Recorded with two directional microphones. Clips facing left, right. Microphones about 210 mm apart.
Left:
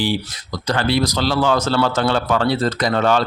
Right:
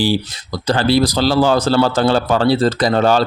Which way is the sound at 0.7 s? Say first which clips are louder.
Right 4 dB; 35° right (ahead or behind).